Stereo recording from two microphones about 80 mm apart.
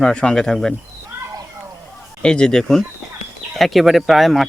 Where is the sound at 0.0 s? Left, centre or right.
Centre.